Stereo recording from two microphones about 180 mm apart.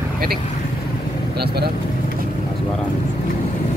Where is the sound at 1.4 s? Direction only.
65° right (ahead or behind).